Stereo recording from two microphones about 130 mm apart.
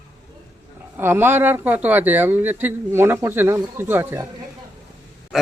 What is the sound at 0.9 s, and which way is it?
Speech, 15° right (ahead or behind).